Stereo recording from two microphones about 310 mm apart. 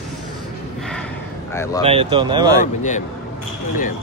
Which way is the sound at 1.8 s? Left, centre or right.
Centre.